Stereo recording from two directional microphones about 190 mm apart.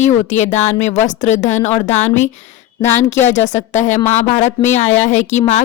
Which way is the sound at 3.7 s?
40° left (ahead or behind).